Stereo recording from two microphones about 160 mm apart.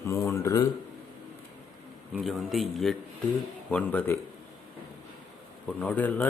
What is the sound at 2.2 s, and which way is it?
A man's voice, centre (ahead or behind).